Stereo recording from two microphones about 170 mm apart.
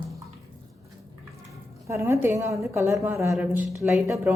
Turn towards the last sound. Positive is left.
turn(degrees=-20)  # may be behind; listen again after turning